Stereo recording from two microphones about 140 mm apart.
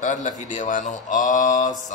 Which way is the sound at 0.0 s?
65° left (ahead or behind).